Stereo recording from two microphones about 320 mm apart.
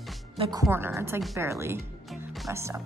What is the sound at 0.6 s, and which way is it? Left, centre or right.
A woman's voice, centre.